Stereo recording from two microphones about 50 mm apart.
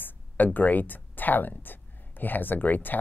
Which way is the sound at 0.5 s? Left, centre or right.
Left.